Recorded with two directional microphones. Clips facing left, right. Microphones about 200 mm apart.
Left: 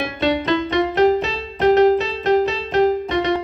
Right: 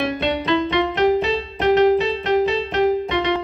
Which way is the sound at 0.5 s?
45° left (ahead or behind).